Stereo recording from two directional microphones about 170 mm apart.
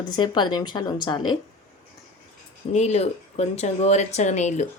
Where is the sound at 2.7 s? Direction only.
40° left (ahead or behind).